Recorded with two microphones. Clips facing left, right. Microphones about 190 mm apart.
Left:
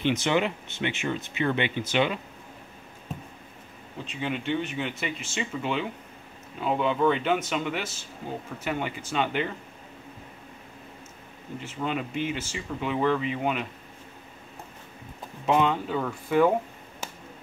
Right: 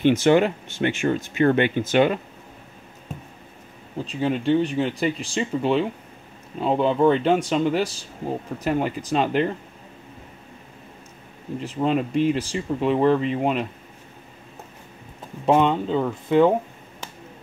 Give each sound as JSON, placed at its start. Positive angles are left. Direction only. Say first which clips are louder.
{"t": 0.2, "sound": "speech", "louder": "right 8 dB", "side_deg": -45}
{"t": 4.0, "sound": "speech", "louder": "right 8 dB", "side_deg": -35}
{"t": 11.6, "sound": "speech", "louder": "right 8 dB", "side_deg": -35}
{"t": 15.4, "sound": "speech", "louder": "right 5 dB", "side_deg": -30}